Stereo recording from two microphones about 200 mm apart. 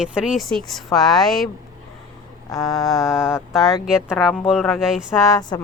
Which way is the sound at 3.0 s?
5° right (ahead or behind).